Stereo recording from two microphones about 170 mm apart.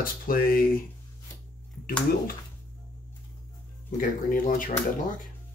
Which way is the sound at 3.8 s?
55° left (ahead or behind).